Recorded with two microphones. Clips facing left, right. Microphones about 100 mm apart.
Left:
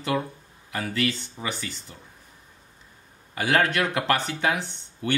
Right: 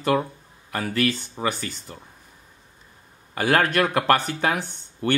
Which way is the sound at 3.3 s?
50° right (ahead or behind).